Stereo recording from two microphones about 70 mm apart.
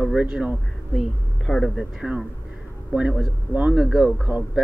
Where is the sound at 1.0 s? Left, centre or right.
Centre.